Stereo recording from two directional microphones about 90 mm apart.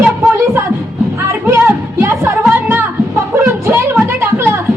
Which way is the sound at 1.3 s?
25° right (ahead or behind).